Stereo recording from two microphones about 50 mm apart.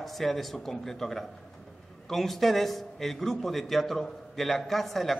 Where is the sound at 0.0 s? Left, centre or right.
Centre.